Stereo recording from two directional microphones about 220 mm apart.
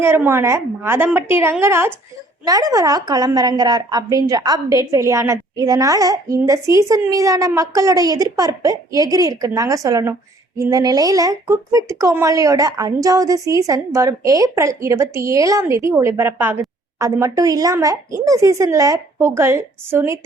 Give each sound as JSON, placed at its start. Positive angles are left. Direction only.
{"t": 0.0, "sound": "speech", "side_deg": -10}